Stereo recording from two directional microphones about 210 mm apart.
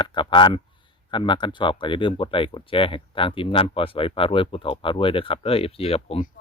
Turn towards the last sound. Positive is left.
turn(degrees=30)  # may be behind; listen again after turning